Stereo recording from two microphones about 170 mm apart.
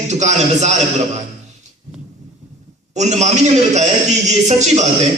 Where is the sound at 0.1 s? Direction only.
45° right (ahead or behind).